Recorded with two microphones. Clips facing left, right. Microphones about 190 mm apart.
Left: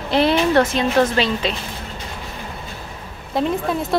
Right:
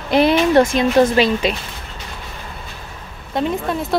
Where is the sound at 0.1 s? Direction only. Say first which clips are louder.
Right 3 dB; 15° right (ahead or behind).